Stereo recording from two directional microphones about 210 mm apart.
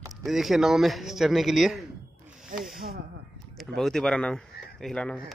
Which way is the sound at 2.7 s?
45° right (ahead or behind).